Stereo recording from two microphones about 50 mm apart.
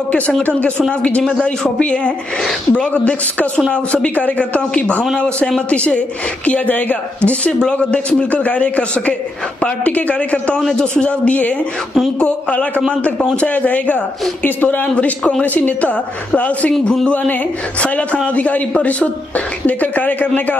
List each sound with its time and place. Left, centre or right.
0.4 s a man's voice: left
1.2 s a man's voice: centre
1.8 s a man's voice: left
7.2 s a man's voice: left